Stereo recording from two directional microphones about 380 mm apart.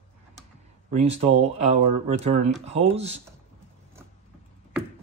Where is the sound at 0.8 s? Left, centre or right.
Centre.